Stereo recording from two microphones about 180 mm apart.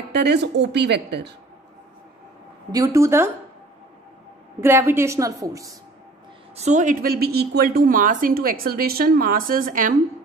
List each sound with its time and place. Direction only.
0.1 s speech: 70° right (ahead or behind)
2.7 s a woman's voice: 15° right (ahead or behind)
4.6 s a woman's voice: 15° right (ahead or behind)
6.5 s a woman's voice: 40° right (ahead or behind)